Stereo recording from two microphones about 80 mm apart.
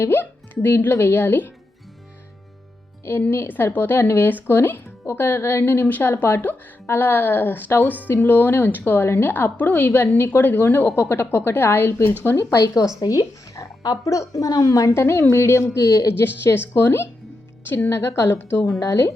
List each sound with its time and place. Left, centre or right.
0.0 s speech: left
3.0 s speech: left
12.4 s a woman's voice: left
18.8 s a woman's voice: left